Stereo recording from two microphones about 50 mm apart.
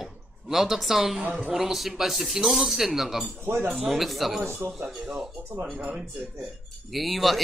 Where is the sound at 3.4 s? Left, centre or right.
Right.